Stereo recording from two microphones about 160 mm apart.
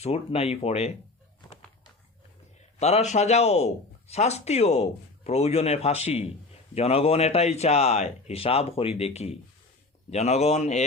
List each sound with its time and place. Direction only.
0.0 s a man's voice: 40° left (ahead or behind)
2.7 s a man's voice: 45° left (ahead or behind)